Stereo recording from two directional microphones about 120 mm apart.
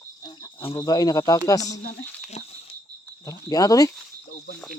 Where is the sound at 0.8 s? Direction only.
35° left (ahead or behind).